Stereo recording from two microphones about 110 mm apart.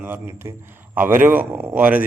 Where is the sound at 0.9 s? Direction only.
15° right (ahead or behind).